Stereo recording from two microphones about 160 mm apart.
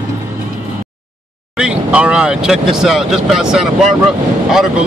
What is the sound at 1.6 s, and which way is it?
Speech, 5° right (ahead or behind).